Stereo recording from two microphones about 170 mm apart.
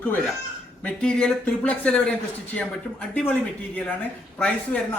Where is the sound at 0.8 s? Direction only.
5° left (ahead or behind).